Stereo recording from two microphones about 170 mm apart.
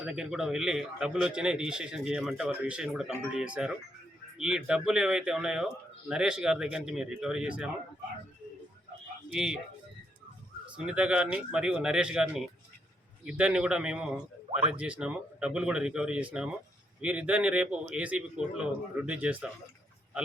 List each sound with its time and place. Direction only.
0.0 s a man's voice: 5° right (ahead or behind)
9.3 s a man's voice: 5° right (ahead or behind)
10.8 s a man's voice: 5° right (ahead or behind)